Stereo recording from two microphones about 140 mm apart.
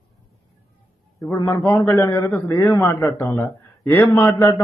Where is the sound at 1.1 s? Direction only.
20° left (ahead or behind).